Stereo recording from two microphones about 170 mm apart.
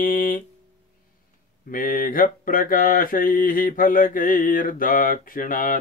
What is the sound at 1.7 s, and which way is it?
Mantra, 55° left (ahead or behind).